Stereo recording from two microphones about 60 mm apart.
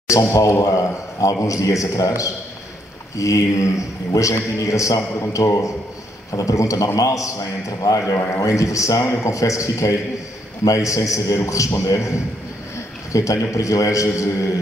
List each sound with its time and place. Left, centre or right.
0.1 s a man's voice: left